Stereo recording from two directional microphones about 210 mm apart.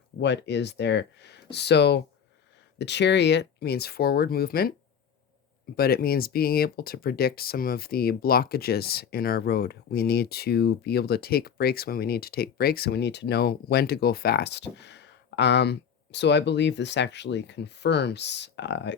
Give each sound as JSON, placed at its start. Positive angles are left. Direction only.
{"t": 0.2, "sound": "speech", "side_deg": 55}
{"t": 5.7, "sound": "speech", "side_deg": 45}